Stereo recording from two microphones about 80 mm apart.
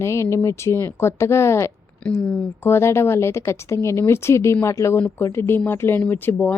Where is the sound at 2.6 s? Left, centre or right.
Left.